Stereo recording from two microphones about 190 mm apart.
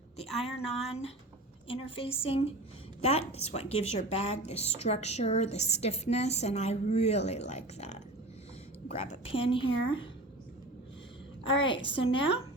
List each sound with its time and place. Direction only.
0.3 s a woman's voice: 30° left (ahead or behind)
11.6 s a woman's voice: 25° left (ahead or behind)